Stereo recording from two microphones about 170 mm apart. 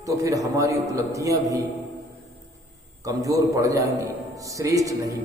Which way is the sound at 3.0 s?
20° right (ahead or behind).